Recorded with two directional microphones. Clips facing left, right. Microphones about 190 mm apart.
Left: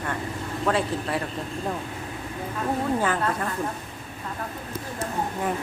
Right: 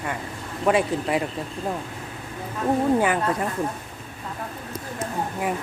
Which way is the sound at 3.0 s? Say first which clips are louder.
Right 3 dB; 15° right (ahead or behind).